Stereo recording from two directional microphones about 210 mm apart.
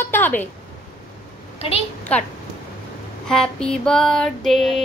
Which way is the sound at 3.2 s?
5° left (ahead or behind).